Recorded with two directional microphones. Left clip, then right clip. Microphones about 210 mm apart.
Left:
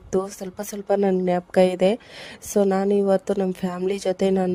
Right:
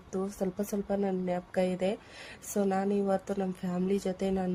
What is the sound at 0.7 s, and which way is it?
A woman's voice, 35° left (ahead or behind).